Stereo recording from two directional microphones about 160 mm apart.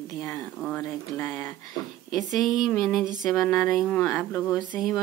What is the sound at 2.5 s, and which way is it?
Speech, 5° right (ahead or behind).